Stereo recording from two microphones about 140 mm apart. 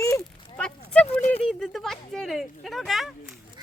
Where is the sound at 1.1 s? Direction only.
45° left (ahead or behind).